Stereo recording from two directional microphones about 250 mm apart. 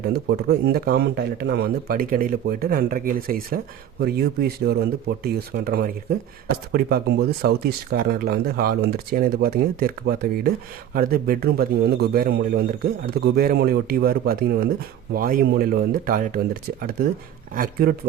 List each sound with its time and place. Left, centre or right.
0.0 s speech: right